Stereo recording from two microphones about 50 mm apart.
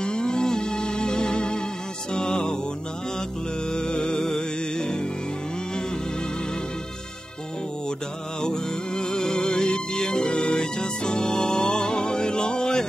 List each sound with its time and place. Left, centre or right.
0.0 s music: centre
3.7 s music: centre
8.4 s music: centre